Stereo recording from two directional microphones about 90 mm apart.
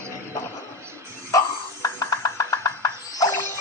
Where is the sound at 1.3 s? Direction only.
40° left (ahead or behind).